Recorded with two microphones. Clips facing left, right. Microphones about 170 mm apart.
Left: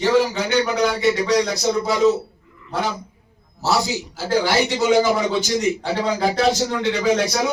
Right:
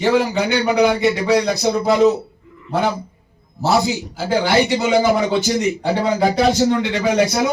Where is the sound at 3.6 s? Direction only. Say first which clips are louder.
Right 4 dB; 55° right (ahead or behind).